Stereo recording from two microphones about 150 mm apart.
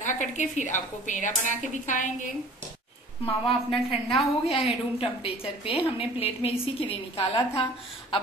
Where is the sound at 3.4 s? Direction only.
35° left (ahead or behind).